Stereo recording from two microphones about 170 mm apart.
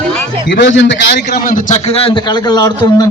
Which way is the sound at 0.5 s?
90° left.